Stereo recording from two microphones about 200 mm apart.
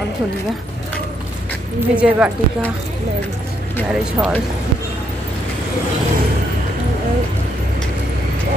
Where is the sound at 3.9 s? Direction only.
5° right (ahead or behind).